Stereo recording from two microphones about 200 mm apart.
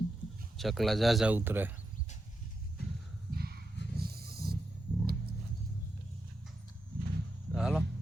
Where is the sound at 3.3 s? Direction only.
50° right (ahead or behind).